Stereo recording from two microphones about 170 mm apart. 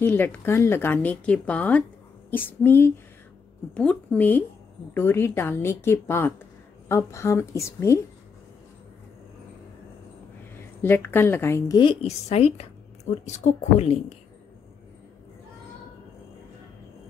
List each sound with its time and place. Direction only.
0.0 s speech: 10° left (ahead or behind)
10.8 s speech: 10° left (ahead or behind); by 14.1 s 40° left (ahead or behind)